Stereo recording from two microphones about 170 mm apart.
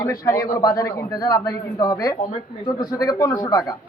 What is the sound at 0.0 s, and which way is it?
A man's voice, 20° left (ahead or behind).